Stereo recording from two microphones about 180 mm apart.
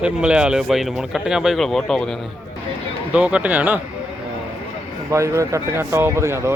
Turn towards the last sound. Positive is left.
turn(degrees=-15)  # may be behind; listen again after turning